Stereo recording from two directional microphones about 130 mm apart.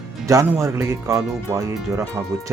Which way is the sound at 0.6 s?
20° right (ahead or behind).